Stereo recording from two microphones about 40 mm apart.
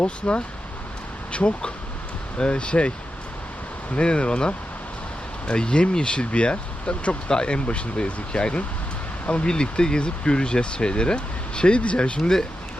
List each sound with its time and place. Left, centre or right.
0.0 s speech: left
3.9 s speech: left